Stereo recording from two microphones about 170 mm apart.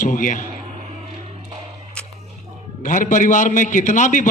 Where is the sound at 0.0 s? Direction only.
50° left (ahead or behind).